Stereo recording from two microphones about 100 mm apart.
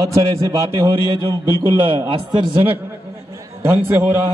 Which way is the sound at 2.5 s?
15° right (ahead or behind).